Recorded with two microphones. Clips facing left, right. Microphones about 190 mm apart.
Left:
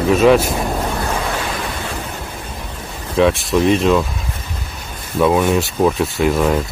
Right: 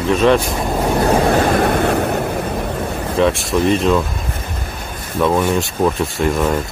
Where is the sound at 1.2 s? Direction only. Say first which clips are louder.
Right 9 dB; 55° right (ahead or behind).